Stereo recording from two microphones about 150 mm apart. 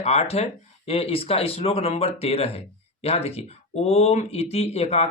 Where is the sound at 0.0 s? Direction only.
45° left (ahead or behind).